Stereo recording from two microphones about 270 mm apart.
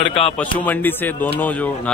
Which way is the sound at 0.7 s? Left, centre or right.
Centre.